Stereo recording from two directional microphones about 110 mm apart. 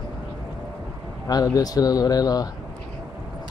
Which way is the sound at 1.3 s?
35° left (ahead or behind).